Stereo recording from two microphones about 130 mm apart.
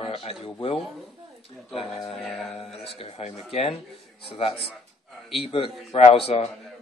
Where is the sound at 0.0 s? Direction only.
45° left (ahead or behind).